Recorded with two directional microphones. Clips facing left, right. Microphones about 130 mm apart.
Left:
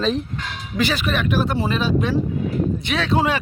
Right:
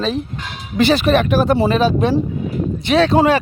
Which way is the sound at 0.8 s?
30° right (ahead or behind).